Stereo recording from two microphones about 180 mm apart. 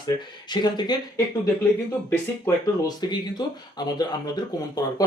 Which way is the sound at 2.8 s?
20° left (ahead or behind).